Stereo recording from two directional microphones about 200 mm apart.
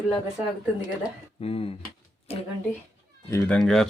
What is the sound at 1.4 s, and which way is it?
Speech, 30° left (ahead or behind).